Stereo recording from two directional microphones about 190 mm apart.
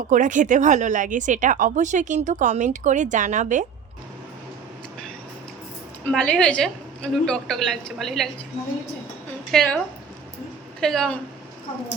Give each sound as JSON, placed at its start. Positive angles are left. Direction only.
{"t": 0.1, "sound": "speech", "side_deg": -40}
{"t": 6.1, "sound": "a woman's voice", "side_deg": 5}
{"t": 9.5, "sound": "a woman's voice", "side_deg": 0}
{"t": 10.8, "sound": "a woman's voice", "side_deg": 5}